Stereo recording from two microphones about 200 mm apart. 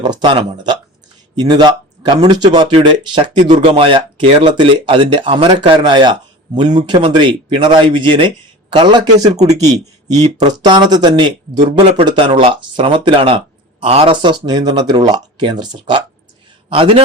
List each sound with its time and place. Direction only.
0.0 s speech: 20° right (ahead or behind)